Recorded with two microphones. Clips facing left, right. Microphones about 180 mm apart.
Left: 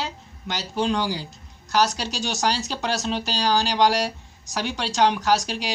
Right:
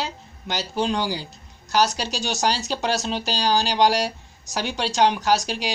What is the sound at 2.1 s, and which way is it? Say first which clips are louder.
Speech: right 1 dB; 5° right (ahead or behind).